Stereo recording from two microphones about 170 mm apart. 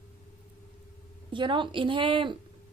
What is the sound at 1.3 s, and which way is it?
A woman's voice, 30° right (ahead or behind).